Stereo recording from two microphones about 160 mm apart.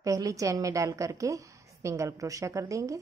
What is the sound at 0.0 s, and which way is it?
Speech, 20° right (ahead or behind).